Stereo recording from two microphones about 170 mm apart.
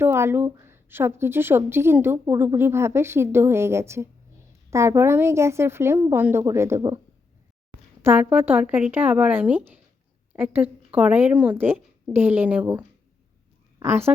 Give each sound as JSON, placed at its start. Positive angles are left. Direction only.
{"t": 0.0, "sound": "a woman's voice", "side_deg": -15}
{"t": 8.0, "sound": "a woman's voice", "side_deg": -10}